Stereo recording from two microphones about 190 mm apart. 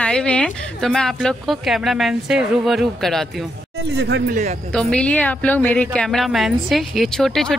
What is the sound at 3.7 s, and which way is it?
Speech, 65° right (ahead or behind).